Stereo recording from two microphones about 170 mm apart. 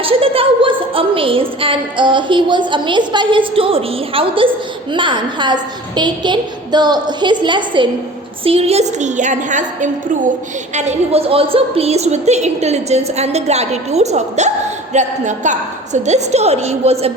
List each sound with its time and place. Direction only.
0.0 s a woman's voice: 35° right (ahead or behind)